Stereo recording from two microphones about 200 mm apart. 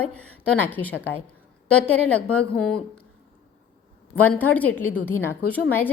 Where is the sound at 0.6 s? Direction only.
10° left (ahead or behind).